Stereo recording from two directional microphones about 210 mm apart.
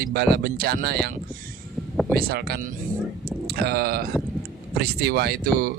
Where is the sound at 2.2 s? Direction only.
50° right (ahead or behind).